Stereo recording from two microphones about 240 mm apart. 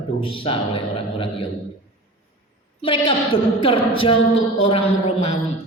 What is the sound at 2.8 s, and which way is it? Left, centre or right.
Speech, left.